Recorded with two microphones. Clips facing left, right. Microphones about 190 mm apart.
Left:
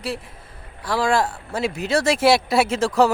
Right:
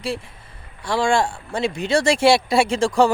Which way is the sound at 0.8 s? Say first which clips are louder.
Right 1 dB; 5° left (ahead or behind).